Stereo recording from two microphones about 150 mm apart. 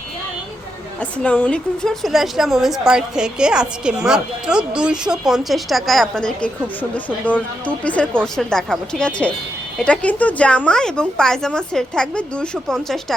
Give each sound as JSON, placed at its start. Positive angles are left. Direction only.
{"t": 1.2, "sound": "a woman's voice", "side_deg": 10}